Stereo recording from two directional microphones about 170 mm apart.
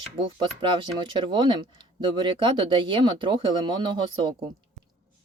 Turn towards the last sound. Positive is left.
turn(degrees=-25)  # may be behind; listen again after turning